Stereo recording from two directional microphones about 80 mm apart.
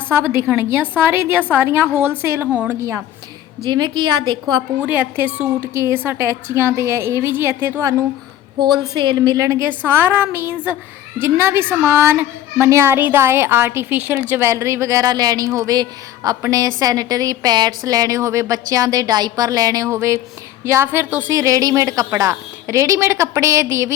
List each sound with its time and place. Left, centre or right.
0.1 s a woman's voice: right
2.5 s a woman's voice: right
3.7 s a woman's voice: right
4.8 s a woman's voice: right
8.9 s a woman's voice: right
9.4 s a woman's voice: right
21.2 s a woman's voice: right